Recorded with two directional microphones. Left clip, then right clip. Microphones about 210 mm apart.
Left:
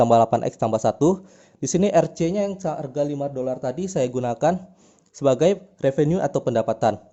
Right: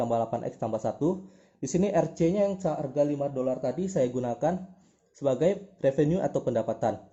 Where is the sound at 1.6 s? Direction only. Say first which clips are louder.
Left 7 dB; 35° left (ahead or behind).